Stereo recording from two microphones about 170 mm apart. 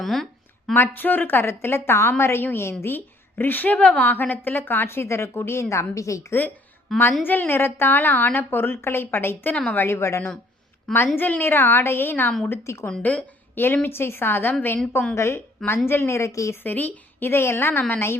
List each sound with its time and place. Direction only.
0.0 s a woman's voice: centre (ahead or behind)
6.9 s a woman's voice: centre (ahead or behind)
7.3 s a woman's voice: 10° left (ahead or behind)
10.9 s a woman's voice: centre (ahead or behind)